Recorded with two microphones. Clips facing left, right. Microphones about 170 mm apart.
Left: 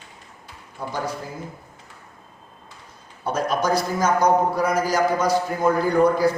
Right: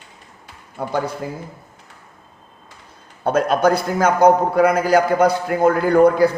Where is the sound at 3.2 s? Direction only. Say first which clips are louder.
Right 6 dB; 60° right (ahead or behind).